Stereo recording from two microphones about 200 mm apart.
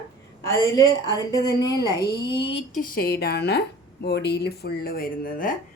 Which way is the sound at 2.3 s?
60° left (ahead or behind).